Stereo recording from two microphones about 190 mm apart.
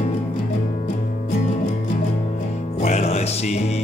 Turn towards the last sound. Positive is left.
turn(degrees=35)  # may be behind; listen again after turning